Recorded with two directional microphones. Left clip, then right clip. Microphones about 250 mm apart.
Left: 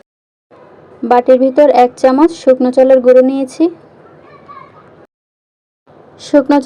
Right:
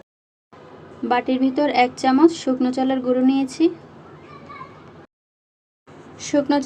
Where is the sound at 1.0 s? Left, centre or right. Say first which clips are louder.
Left 12 dB; centre.